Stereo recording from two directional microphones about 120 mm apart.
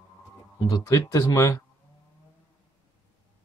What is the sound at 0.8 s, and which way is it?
Speech, 25° left (ahead or behind).